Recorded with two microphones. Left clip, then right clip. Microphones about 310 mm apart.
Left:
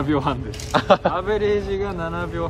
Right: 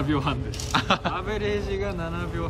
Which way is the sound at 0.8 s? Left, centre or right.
Centre.